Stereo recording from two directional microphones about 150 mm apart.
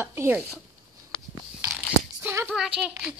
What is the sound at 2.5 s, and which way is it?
Speech, 5° right (ahead or behind).